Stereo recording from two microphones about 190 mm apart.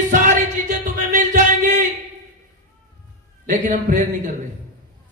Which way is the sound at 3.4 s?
40° right (ahead or behind).